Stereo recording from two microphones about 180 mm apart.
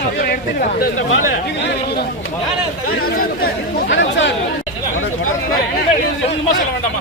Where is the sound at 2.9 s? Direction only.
55° left (ahead or behind).